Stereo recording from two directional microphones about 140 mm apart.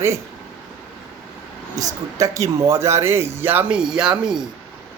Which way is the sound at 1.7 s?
25° right (ahead or behind).